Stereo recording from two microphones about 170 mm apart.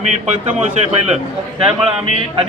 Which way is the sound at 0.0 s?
45° right (ahead or behind).